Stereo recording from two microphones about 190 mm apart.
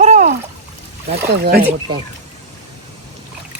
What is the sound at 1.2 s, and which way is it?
Speech, 55° right (ahead or behind).